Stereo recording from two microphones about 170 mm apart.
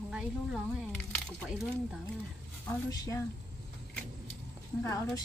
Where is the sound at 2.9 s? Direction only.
20° left (ahead or behind).